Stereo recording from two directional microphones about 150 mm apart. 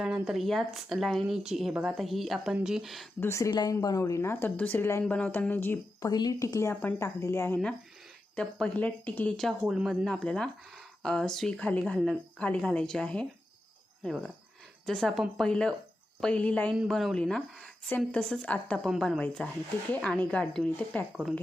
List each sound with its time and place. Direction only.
0.0 s speech: 5° right (ahead or behind)
3.2 s a woman's voice: 20° left (ahead or behind)
8.4 s a woman's voice: 5° left (ahead or behind)
14.8 s a woman's voice: centre (ahead or behind)
18.9 s a woman's voice: centre (ahead or behind)